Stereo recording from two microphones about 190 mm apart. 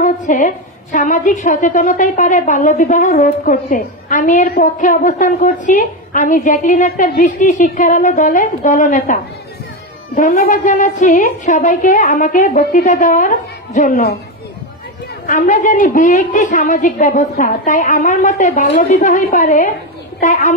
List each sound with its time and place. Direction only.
0.0 s a woman's voice: 45° left (ahead or behind)
15.2 s a woman's voice: 40° left (ahead or behind)